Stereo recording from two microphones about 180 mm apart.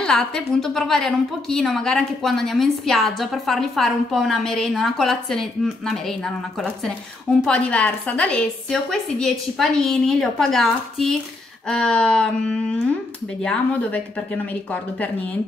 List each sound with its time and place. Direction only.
0.0 s a woman's voice: 5° left (ahead or behind)